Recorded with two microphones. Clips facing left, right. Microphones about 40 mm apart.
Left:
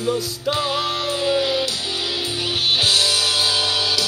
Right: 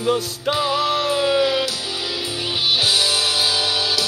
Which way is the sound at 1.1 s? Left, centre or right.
Centre.